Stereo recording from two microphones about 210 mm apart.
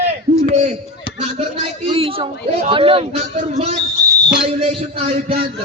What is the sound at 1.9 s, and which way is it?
A man's voice, 25° right (ahead or behind).